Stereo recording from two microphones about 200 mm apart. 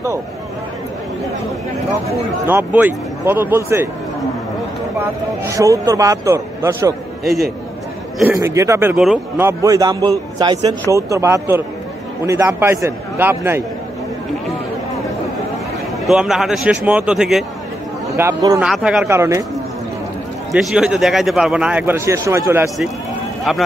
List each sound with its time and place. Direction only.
2.4 s a man's voice: 10° right (ahead or behind)
5.0 s a man's voice: 15° right (ahead or behind)
8.4 s a man's voice: 15° right (ahead or behind)
8.9 s a man's voice: 5° right (ahead or behind)
16.1 s speech: centre (ahead or behind)
18.1 s a man's voice: 15° right (ahead or behind)
18.6 s speech: centre (ahead or behind)
19.0 s a man's voice: 15° right (ahead or behind)
20.5 s speech: 5° right (ahead or behind)